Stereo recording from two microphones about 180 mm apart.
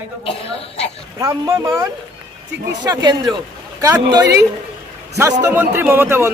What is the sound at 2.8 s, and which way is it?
Speech, 20° right (ahead or behind).